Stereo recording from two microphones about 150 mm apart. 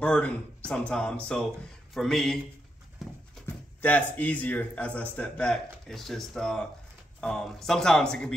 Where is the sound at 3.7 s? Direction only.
10° left (ahead or behind).